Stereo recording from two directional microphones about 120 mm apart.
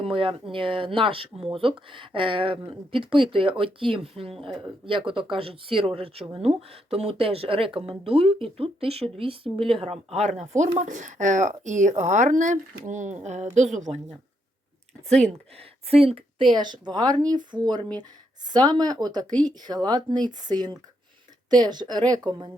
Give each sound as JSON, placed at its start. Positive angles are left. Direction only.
{"t": 0.0, "sound": "speech", "side_deg": -50}
{"t": 10.3, "sound": "speech", "side_deg": -80}
{"t": 13.9, "sound": "speech", "side_deg": -5}
{"t": 15.5, "sound": "speech", "side_deg": -55}